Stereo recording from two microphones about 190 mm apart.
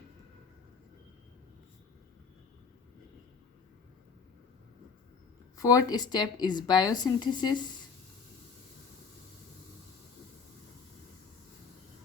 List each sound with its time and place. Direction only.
5.5 s a woman's voice: 20° left (ahead or behind)